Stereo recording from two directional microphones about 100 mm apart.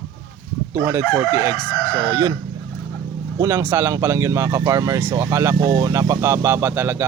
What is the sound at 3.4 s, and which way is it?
Speech, 25° right (ahead or behind).